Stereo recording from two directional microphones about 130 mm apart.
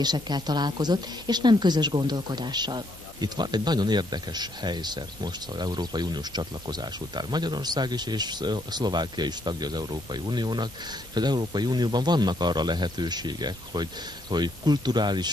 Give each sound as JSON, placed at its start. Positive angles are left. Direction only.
{"t": 0.0, "sound": "speech", "side_deg": -35}